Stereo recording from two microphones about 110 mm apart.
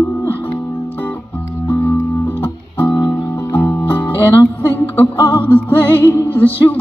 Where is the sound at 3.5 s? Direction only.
20° left (ahead or behind).